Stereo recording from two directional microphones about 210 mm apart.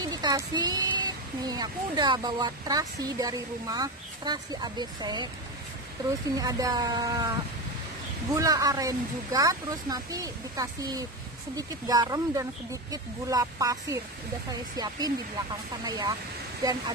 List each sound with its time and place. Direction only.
0.0 s speech: 20° right (ahead or behind)
6.3 s speech: 15° right (ahead or behind)
8.4 s speech: 15° right (ahead or behind)